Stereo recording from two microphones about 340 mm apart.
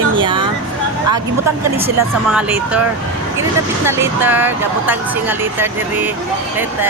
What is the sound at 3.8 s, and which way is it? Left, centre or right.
Speech, centre.